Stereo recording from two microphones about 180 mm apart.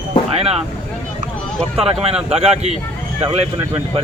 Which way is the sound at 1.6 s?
30° right (ahead or behind).